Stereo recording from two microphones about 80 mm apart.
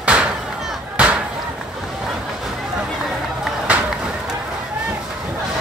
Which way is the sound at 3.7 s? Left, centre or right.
Centre.